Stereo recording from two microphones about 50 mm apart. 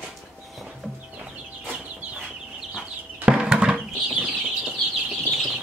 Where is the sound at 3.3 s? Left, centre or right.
Centre.